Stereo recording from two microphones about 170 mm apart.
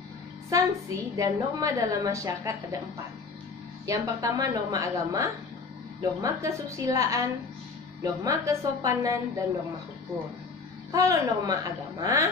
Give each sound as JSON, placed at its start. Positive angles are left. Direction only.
{"t": 0.5, "sound": "a woman's voice", "side_deg": -20}
{"t": 3.8, "sound": "a woman's voice", "side_deg": -20}
{"t": 10.9, "sound": "a woman's voice", "side_deg": -20}